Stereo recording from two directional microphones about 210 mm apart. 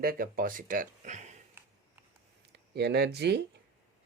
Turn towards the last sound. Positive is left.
turn(degrees=-50)  # may be behind; listen again after turning